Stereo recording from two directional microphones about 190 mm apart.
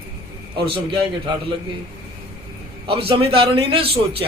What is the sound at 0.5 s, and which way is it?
Speech, 25° right (ahead or behind).